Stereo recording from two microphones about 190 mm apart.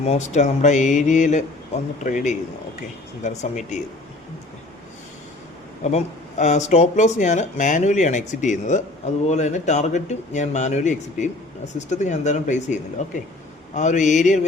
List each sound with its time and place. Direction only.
0.0 s speech: 35° left (ahead or behind)
5.8 s speech: 35° left (ahead or behind)